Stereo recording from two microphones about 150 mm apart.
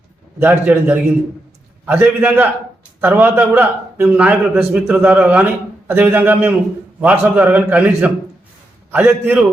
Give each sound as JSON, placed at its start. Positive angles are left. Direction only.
{"t": 0.3, "sound": "a man's voice", "side_deg": -10}